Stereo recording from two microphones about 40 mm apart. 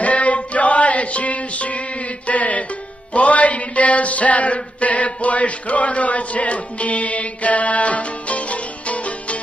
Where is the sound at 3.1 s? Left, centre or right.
Left.